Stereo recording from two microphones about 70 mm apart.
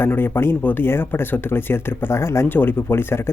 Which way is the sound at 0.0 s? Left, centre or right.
Left.